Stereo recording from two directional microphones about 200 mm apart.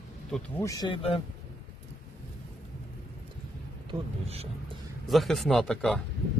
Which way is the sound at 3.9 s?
30° right (ahead or behind).